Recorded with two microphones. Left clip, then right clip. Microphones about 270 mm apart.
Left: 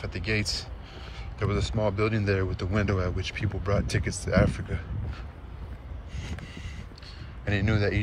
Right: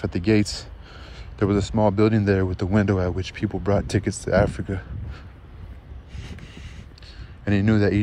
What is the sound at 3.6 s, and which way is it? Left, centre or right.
Speech, right.